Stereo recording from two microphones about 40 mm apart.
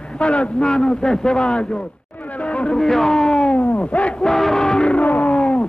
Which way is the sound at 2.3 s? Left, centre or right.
Left.